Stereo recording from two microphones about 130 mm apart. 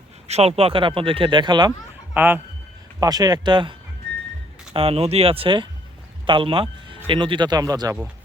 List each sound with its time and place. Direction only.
0.3 s speech: 50° right (ahead or behind); by 1.7 s 35° right (ahead or behind)
2.1 s a man's voice: 15° right (ahead or behind)
3.0 s speech: 30° right (ahead or behind)
4.7 s speech: 50° right (ahead or behind)
6.2 s a sound: 40° right (ahead or behind)
7.1 s speech: 40° right (ahead or behind)